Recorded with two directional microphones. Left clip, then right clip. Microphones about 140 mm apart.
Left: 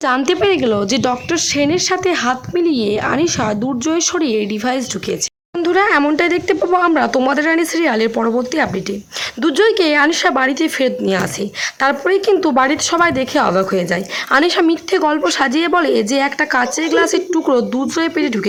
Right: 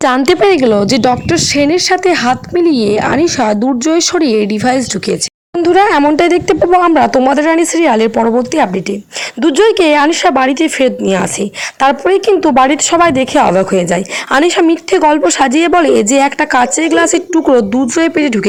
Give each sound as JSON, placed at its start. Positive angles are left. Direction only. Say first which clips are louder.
{"t": 0.0, "sound": "a woman's voice", "louder": "right 6 dB", "side_deg": -45}